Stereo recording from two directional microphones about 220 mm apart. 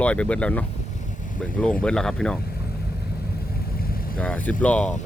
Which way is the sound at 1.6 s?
5° left (ahead or behind).